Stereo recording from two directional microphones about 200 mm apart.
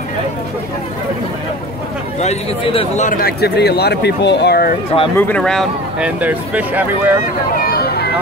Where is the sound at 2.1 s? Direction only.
30° left (ahead or behind).